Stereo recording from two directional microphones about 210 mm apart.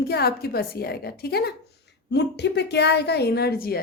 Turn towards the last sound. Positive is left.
turn(degrees=45)  # may be behind; listen again after turning